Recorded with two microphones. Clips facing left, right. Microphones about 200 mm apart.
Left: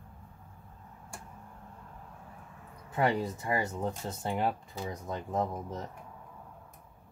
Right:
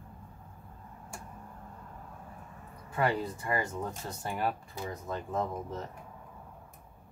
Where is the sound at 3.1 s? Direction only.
20° left (ahead or behind).